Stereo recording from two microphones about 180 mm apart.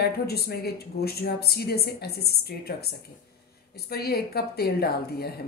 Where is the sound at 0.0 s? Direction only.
60° left (ahead or behind).